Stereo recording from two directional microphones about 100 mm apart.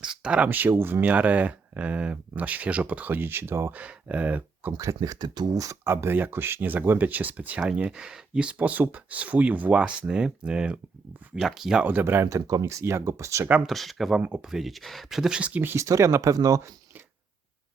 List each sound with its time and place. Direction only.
0.0 s speech: 10° right (ahead or behind)
3.8 s speech: 10° right (ahead or behind)
4.8 s speech: 35° right (ahead or behind)
5.9 s speech: 20° right (ahead or behind)
13.7 s speech: centre (ahead or behind)
14.2 s speech: 15° right (ahead or behind)
14.4 s speech: 5° right (ahead or behind); by 16.7 s 35° right (ahead or behind)